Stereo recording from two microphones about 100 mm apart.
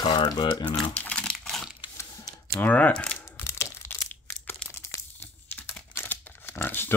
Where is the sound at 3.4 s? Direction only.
25° left (ahead or behind).